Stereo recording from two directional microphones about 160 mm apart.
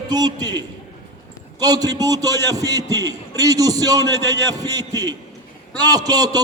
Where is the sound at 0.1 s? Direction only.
25° right (ahead or behind).